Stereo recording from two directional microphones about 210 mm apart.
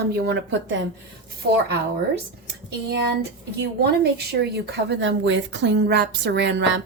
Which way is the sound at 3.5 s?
50° right (ahead or behind).